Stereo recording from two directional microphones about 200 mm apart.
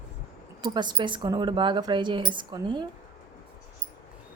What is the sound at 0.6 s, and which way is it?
A woman's voice, 20° right (ahead or behind).